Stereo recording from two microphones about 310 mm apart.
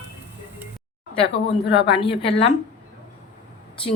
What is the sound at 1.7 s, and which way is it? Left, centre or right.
Speech, centre.